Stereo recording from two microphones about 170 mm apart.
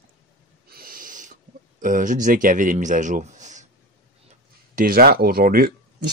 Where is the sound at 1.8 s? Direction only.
50° right (ahead or behind).